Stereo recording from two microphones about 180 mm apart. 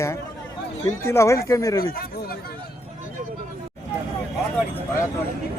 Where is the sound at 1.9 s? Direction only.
55° left (ahead or behind).